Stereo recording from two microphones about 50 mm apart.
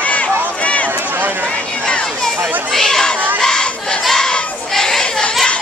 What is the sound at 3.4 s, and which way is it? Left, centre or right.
Crowd, centre.